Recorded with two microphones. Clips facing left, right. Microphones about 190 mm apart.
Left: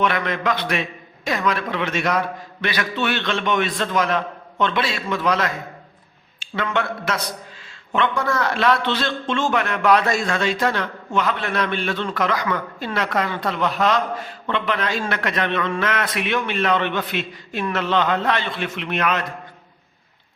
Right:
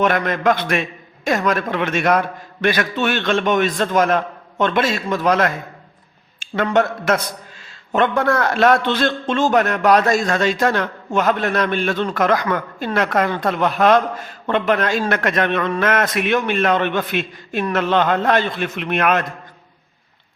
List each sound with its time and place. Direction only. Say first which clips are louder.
0.0 s a man's voice: right 4 dB; 45° right (ahead or behind)
6.7 s a man's voice: right 7 dB; 45° right (ahead or behind)